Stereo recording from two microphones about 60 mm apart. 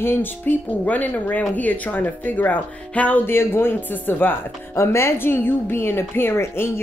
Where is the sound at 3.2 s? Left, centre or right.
Left.